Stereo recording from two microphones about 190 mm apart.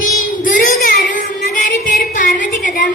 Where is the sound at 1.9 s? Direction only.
45° left (ahead or behind).